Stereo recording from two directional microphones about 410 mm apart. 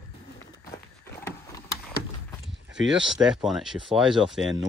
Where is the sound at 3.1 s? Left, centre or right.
Centre.